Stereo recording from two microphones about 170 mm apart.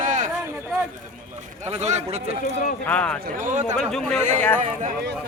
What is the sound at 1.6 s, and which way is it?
Speech, 40° right (ahead or behind).